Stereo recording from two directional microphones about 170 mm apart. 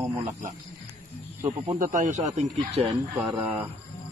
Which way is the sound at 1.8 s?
45° right (ahead or behind).